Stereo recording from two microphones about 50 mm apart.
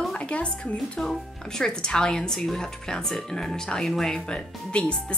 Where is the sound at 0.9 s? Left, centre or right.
Centre.